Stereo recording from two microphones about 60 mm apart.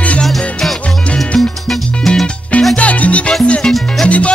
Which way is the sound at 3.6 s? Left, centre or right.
Centre.